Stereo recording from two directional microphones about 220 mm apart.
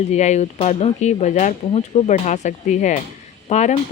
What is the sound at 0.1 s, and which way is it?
Speech, 30° left (ahead or behind).